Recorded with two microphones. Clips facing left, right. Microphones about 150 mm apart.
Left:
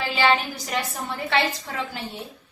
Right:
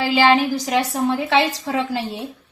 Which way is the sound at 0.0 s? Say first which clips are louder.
Right 6 dB; 90° right.